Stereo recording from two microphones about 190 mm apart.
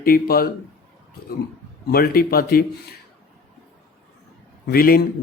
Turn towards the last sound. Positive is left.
turn(degrees=50)  # may be behind; listen again after turning